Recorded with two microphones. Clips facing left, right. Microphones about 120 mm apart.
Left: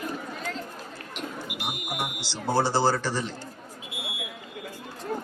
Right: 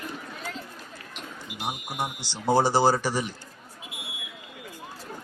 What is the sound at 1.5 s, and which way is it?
Smoke detector, 10° left (ahead or behind).